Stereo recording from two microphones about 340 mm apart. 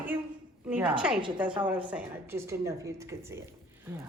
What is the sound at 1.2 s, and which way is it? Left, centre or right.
A woman's voice, centre.